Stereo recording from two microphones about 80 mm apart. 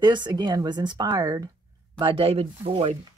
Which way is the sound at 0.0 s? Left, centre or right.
Right.